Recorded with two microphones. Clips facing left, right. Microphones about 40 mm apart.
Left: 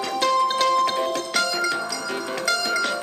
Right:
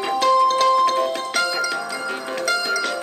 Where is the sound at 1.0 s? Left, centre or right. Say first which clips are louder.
Right 2 dB; centre.